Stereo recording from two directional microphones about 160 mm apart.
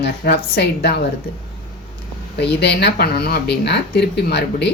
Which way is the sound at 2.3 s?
90° left.